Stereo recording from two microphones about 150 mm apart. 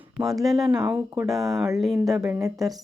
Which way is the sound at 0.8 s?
10° right (ahead or behind).